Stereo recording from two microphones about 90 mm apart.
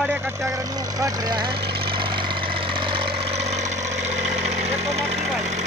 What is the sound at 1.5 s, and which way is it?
Engine, 70° right (ahead or behind).